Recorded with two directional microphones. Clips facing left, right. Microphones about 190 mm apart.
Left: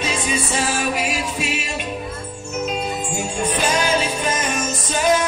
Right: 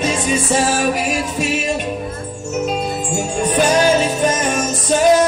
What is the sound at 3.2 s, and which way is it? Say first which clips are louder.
Music: right 6 dB; 40° right (ahead or behind).